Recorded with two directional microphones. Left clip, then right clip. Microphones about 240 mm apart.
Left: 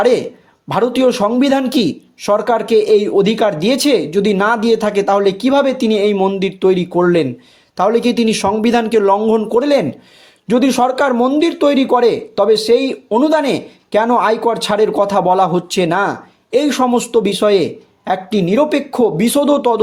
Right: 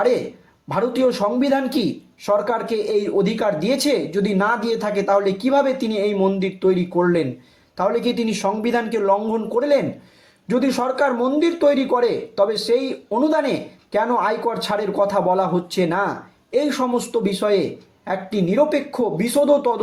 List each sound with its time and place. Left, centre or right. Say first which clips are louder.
0.7 s speech: left 6 dB; left